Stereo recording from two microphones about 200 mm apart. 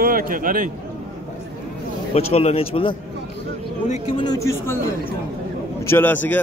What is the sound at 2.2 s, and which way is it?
A man's voice, 30° left (ahead or behind).